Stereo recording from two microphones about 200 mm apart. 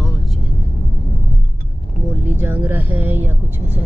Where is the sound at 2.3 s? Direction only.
10° right (ahead or behind).